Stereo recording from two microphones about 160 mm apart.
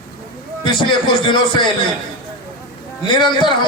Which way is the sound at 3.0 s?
30° left (ahead or behind).